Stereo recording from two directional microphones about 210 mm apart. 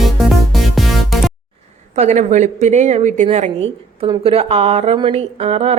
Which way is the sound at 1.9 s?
35° right (ahead or behind).